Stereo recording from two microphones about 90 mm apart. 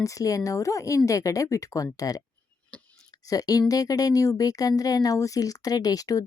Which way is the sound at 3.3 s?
40° left (ahead or behind).